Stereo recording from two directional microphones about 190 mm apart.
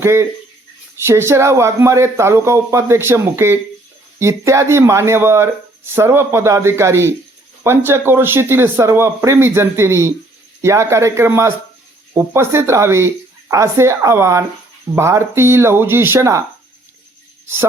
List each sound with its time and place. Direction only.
0.0 s speech: 15° right (ahead or behind)